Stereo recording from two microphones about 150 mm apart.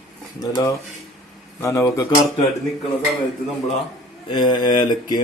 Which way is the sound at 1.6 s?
20° left (ahead or behind).